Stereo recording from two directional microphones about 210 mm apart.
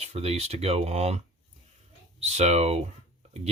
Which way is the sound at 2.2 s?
30° right (ahead or behind).